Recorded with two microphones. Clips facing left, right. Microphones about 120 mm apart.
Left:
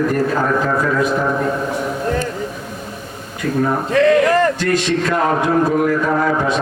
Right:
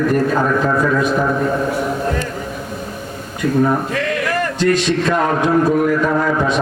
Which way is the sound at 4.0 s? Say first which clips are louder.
Left 7 dB; 30° left (ahead or behind).